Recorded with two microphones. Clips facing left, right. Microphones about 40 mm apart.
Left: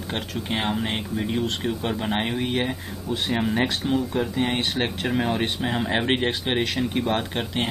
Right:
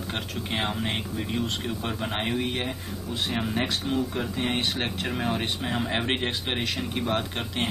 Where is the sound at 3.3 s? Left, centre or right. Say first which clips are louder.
Left 5 dB; left.